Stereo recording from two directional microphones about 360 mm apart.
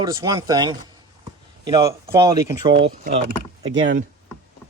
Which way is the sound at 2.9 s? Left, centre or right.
Right.